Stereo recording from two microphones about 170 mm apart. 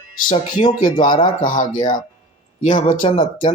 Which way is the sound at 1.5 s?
50° left (ahead or behind).